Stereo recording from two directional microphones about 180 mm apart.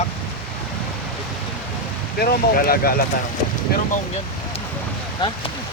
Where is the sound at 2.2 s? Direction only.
55° left (ahead or behind).